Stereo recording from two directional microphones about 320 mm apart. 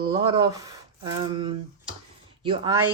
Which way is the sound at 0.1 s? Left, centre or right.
Centre.